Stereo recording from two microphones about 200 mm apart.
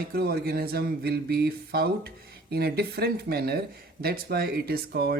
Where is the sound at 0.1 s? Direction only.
50° right (ahead or behind).